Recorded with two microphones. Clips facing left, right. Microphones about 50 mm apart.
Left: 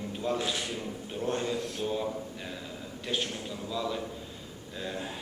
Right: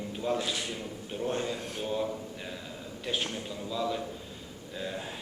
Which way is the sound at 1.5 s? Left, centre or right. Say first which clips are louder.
Left 3 dB; right.